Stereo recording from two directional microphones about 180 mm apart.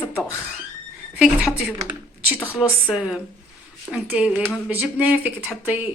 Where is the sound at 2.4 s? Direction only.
15° left (ahead or behind).